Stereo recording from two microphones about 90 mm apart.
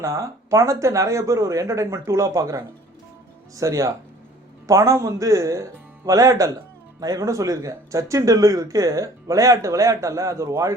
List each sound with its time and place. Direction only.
0.0 s speech: 35° right (ahead or behind)